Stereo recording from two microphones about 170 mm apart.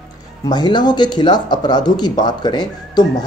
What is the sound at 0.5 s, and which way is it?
Speech, 25° left (ahead or behind).